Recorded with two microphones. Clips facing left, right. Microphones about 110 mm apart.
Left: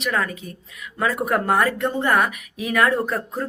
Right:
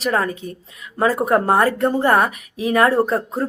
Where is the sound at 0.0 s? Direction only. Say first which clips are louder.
Right 4 dB; 35° right (ahead or behind).